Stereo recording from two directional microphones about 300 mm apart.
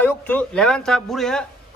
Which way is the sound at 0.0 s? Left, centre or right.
Centre.